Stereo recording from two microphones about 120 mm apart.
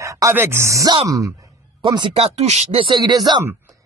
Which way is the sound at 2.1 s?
60° right (ahead or behind).